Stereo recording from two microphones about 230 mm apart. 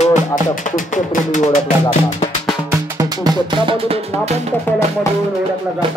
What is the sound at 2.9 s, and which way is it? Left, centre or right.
Speech, centre.